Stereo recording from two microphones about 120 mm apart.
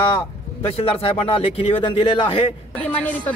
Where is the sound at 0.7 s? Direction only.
55° left (ahead or behind).